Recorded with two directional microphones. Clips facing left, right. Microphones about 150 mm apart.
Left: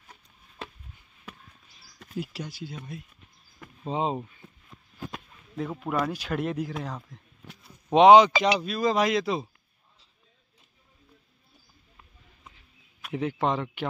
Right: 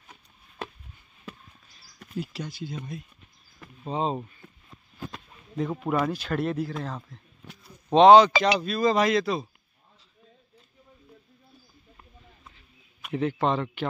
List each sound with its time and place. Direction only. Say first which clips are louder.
2.1 s speech: right 1 dB; 10° left (ahead or behind)
3.8 s speech: even; 15° left (ahead or behind)
5.9 s speech: right 2 dB; centre (ahead or behind)
6.1 s speech: right 2 dB; 10° left (ahead or behind)
13.1 s speech: right 2 dB; 10° left (ahead or behind)